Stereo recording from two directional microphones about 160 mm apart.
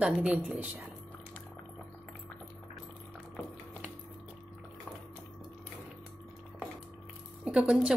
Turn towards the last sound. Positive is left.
turn(degrees=-5)  # may be behind; listen again after turning